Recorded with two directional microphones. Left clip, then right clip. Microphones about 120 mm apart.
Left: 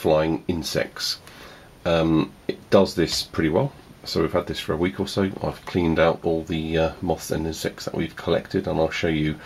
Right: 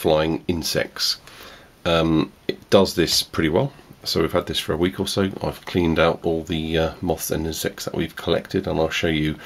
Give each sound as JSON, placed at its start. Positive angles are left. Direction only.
{"t": 0.0, "sound": "speech", "side_deg": -30}
{"t": 1.8, "sound": "speech", "side_deg": -30}